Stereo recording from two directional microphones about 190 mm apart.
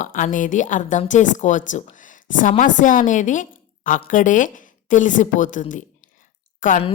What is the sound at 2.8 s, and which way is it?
A woman's voice, 40° left (ahead or behind).